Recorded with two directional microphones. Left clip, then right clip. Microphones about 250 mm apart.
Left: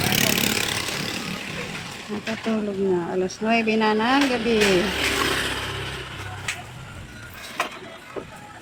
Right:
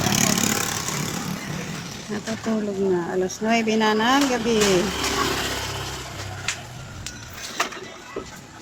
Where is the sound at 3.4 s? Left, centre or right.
Centre.